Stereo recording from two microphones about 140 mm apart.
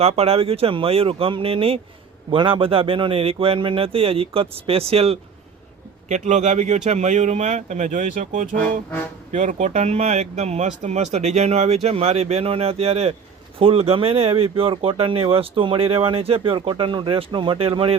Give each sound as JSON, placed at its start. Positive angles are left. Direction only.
{"t": 0.0, "sound": "speech", "side_deg": -45}
{"t": 6.1, "sound": "speech", "side_deg": -55}